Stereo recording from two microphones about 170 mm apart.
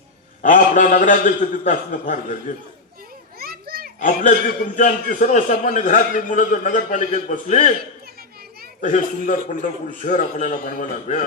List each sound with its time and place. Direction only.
0.4 s a man's voice: 50° left (ahead or behind)
3.3 s children playing: 65° right (ahead or behind)
4.0 s a man's voice: 50° left (ahead or behind)
8.8 s a man's voice: 50° left (ahead or behind)